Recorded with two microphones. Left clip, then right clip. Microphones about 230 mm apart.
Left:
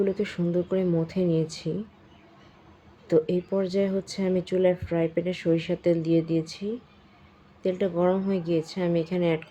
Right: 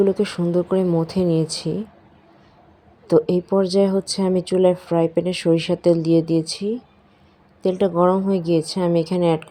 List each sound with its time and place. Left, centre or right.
0.0 s speech: centre
3.1 s speech: right